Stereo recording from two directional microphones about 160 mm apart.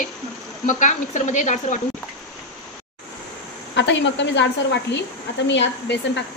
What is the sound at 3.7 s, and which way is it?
Speech, 90° left.